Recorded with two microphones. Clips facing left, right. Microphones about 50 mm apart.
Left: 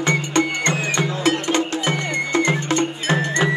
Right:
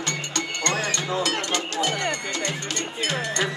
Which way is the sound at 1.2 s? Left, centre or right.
Left.